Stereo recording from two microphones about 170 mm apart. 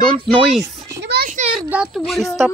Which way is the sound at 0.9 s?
75° right (ahead or behind).